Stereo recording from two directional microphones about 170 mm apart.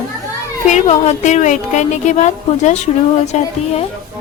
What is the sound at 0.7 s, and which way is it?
A woman's voice, 45° left (ahead or behind).